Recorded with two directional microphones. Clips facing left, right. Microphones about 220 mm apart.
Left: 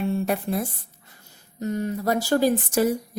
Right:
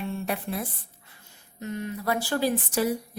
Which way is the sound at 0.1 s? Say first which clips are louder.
Left 6 dB; 45° left (ahead or behind).